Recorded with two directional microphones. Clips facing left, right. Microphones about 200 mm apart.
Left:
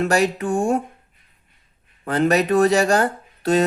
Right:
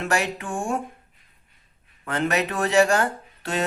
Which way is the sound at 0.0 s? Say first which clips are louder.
Left 7 dB; 40° left (ahead or behind).